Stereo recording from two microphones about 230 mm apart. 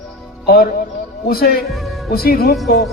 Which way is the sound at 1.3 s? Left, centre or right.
Left.